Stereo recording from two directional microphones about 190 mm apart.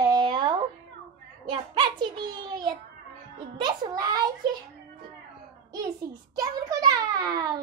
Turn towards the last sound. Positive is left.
turn(degrees=-20)  # may be behind; listen again after turning